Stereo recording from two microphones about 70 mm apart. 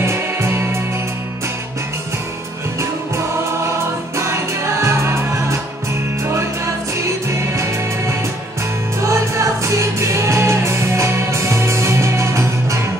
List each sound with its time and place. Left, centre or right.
0.0 s music: right
4.8 s music: right